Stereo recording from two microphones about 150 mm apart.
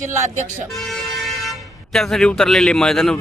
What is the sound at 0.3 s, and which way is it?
Speech, 55° right (ahead or behind).